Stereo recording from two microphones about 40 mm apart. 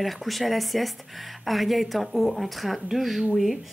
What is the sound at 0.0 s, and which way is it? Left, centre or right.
A woman's voice, centre.